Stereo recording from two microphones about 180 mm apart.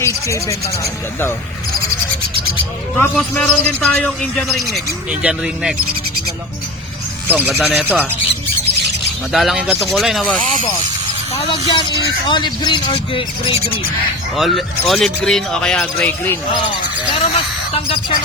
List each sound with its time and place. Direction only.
0.0 s speech: 15° left (ahead or behind)
3.0 s speech: 5° left (ahead or behind)
7.3 s speech: 10° right (ahead or behind)
9.3 s speech: centre (ahead or behind)
11.7 s speech: 25° left (ahead or behind)
14.3 s speech: centre (ahead or behind)
17.1 s a sound: 30° left (ahead or behind)